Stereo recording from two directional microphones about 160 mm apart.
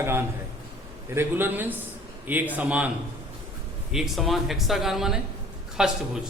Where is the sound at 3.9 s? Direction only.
Centre (ahead or behind).